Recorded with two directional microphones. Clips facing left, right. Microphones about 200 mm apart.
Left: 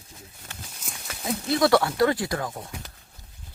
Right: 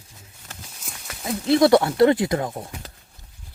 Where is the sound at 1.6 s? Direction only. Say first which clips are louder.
Right 4 dB; 25° right (ahead or behind).